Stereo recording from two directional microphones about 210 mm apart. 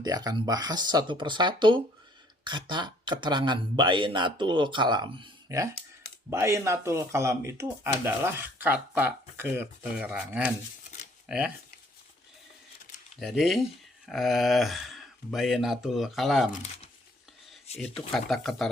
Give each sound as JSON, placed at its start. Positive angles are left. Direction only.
{"t": 0.0, "sound": "speech", "side_deg": -20}
{"t": 13.4, "sound": "speech", "side_deg": 0}
{"t": 17.7, "sound": "speech", "side_deg": 0}